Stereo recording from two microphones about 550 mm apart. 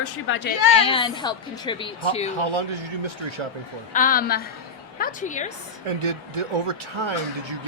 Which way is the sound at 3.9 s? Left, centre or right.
Centre.